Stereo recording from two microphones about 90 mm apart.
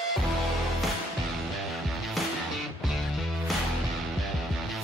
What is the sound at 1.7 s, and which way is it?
Music, centre (ahead or behind).